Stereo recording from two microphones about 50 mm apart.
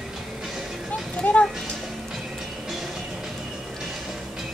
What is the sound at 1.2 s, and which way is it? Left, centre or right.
Music, left.